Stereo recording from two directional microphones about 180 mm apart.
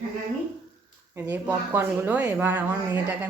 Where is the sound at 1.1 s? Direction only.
10° right (ahead or behind).